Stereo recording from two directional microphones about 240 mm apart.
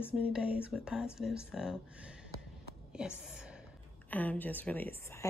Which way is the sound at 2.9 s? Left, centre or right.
Centre.